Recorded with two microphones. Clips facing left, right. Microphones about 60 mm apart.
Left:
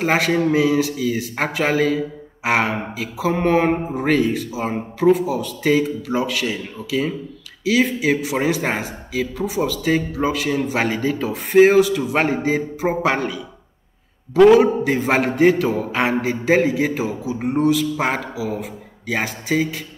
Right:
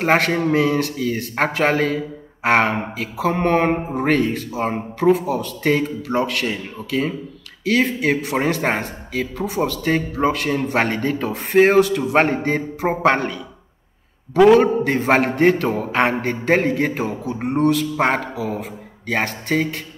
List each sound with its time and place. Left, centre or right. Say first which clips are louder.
0.0 s a man's voice: right 1 dB; centre
14.3 s a man's voice: left 1 dB; centre